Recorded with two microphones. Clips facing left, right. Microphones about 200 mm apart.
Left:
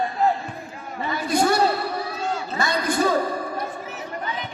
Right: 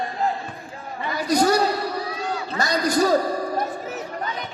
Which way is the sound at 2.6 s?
40° right (ahead or behind).